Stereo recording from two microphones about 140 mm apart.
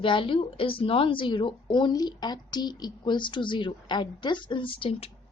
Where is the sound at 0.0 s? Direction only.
35° left (ahead or behind).